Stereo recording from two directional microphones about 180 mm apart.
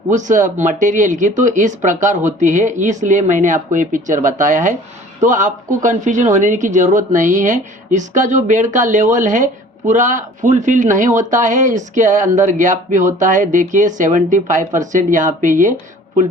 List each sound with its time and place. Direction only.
0.1 s speech: 45° right (ahead or behind)